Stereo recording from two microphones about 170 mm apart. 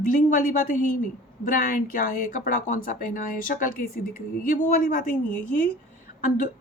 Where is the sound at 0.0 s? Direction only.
50° left (ahead or behind).